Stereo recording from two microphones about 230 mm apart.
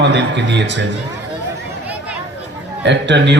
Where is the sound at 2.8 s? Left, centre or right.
Right.